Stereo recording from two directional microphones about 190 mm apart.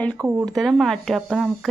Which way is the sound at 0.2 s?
10° right (ahead or behind).